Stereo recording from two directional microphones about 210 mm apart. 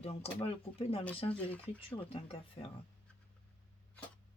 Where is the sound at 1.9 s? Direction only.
30° left (ahead or behind).